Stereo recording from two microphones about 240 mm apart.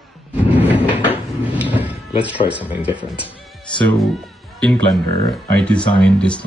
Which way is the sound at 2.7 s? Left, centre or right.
Centre.